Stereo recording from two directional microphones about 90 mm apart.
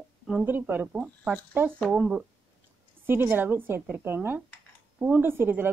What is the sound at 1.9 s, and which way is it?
A woman's voice, 15° right (ahead or behind).